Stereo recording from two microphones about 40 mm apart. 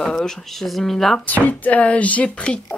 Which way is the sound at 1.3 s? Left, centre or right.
Left.